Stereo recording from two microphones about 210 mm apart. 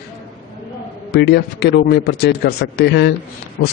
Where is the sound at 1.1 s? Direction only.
50° left (ahead or behind).